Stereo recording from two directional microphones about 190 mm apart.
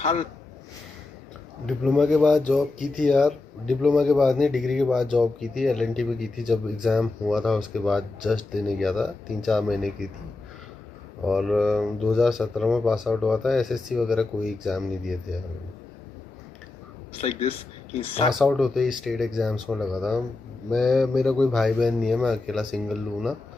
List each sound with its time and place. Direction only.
0.0 s speech: 35° left (ahead or behind)
1.6 s speech: centre (ahead or behind)
11.2 s speech: centre (ahead or behind)
17.2 s speech: 35° left (ahead or behind)
18.3 s speech: centre (ahead or behind)